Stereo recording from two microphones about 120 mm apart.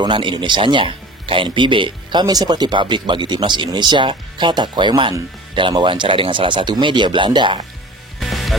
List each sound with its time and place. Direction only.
0.0 s speech: 40° right (ahead or behind)
8.2 s music: centre (ahead or behind)